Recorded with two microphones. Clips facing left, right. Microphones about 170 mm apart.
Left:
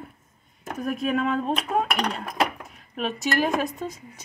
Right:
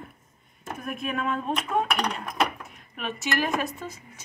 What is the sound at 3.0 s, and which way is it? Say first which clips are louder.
Speech: left 4 dB; 35° left (ahead or behind).